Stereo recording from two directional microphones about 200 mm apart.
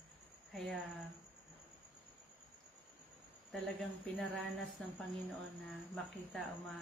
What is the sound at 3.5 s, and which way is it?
Speech, centre (ahead or behind).